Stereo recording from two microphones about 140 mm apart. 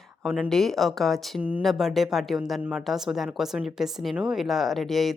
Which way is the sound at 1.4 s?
10° right (ahead or behind).